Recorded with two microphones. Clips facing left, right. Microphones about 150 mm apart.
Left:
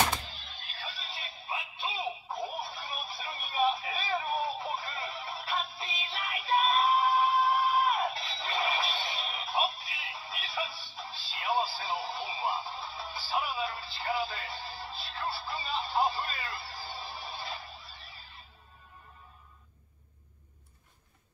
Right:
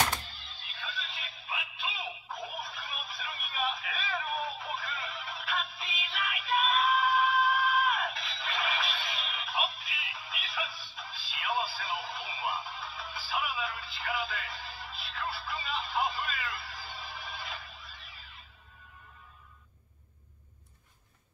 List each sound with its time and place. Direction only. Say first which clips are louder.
0.8 s synthetic singing: right 1 dB; 30° left (ahead or behind)